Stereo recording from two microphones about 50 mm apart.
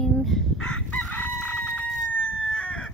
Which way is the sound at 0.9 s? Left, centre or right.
Left.